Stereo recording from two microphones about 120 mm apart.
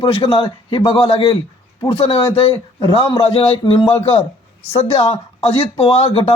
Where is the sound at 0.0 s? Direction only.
50° left (ahead or behind).